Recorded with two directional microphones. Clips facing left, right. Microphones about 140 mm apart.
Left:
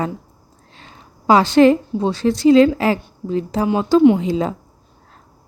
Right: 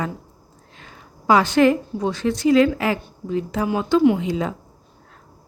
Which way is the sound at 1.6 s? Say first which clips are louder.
Left 4 dB; 30° left (ahead or behind).